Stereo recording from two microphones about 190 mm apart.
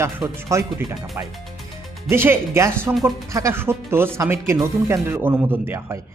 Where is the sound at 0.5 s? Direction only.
15° right (ahead or behind).